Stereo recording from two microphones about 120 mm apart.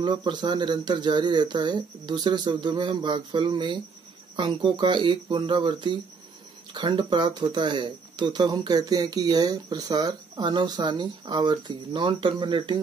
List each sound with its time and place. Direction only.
0.0 s speech: 40° right (ahead or behind)